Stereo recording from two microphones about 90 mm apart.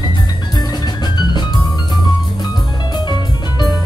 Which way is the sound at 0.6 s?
50° left (ahead or behind).